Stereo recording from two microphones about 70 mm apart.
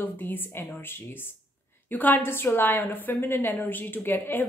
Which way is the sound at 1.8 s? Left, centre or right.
Left.